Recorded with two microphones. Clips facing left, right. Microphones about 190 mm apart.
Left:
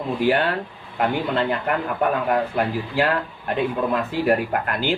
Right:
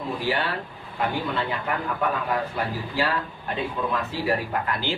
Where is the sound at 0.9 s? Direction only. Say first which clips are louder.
Left 5 dB; 55° left (ahead or behind).